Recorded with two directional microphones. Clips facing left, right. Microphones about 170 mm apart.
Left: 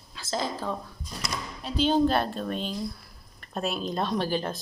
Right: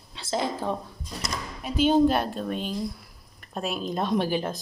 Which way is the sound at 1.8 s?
10° right (ahead or behind).